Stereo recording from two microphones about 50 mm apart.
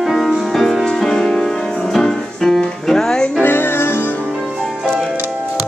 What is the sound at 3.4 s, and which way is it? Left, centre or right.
Music, left.